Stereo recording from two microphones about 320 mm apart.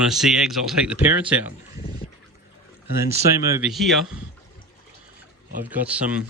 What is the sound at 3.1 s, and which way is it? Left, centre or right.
Speech, centre.